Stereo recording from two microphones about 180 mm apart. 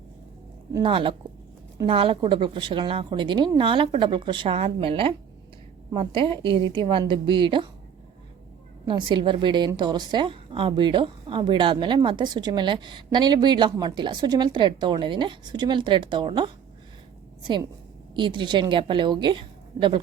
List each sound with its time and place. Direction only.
0.7 s a woman's voice: 30° right (ahead or behind)
8.9 s a woman's voice: 25° right (ahead or behind)